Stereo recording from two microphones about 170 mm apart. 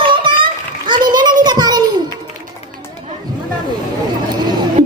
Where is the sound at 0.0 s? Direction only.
30° right (ahead or behind).